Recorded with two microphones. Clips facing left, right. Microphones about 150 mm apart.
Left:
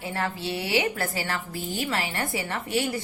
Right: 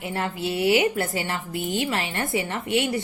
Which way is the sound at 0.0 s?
20° right (ahead or behind).